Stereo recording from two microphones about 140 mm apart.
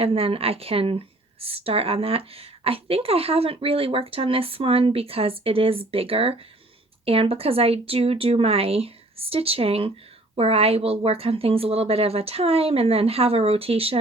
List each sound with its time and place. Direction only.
0.0 s speech: 45° right (ahead or behind)